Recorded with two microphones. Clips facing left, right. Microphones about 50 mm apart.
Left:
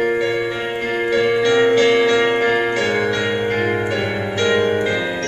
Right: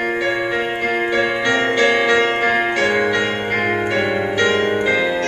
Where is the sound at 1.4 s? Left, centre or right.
Centre.